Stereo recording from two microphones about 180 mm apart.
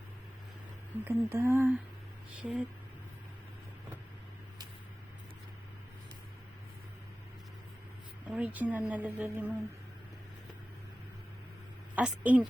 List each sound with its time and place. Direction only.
1.0 s speech: 10° right (ahead or behind)
8.3 s speech: 10° right (ahead or behind)
11.9 s speech: 10° right (ahead or behind)